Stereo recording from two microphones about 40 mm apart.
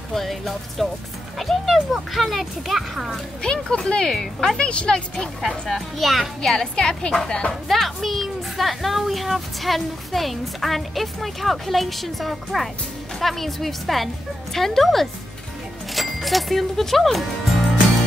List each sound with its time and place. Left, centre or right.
0.1 s speech: centre
3.6 s a woman's voice: left
4.6 s speech: left
5.5 s speech: centre
6.5 s a woman's voice: centre
7.6 s speech: centre